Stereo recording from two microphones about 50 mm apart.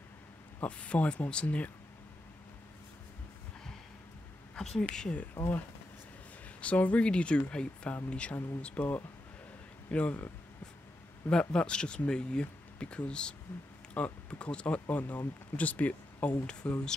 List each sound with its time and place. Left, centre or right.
0.6 s speech: left
4.6 s speech: centre
6.6 s speech: left
9.8 s speech: left
11.2 s speech: centre